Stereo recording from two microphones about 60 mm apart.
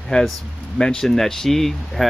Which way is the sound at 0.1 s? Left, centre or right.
Centre.